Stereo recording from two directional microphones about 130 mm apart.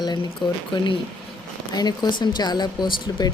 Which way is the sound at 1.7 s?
30° left (ahead or behind).